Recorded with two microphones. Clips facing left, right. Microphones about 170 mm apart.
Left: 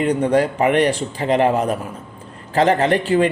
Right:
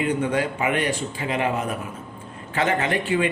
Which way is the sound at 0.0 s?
35° left (ahead or behind).